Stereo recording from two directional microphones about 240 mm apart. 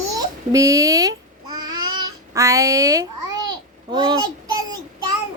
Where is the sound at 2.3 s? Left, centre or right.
Centre.